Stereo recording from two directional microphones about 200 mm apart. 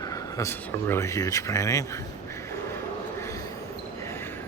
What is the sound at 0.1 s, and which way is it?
Speech, 15° left (ahead or behind).